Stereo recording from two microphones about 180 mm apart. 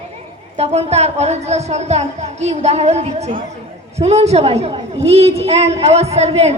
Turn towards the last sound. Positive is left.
turn(degrees=-35)  # may be behind; listen again after turning